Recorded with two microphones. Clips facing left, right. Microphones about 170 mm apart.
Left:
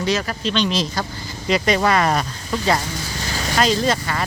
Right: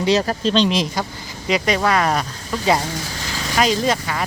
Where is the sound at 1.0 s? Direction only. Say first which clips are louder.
Right 1 dB; 20° right (ahead or behind).